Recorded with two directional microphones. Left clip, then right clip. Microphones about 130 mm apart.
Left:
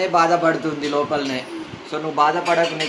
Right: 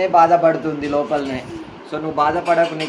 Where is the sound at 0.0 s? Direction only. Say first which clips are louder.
Right 4 dB; 70° right (ahead or behind).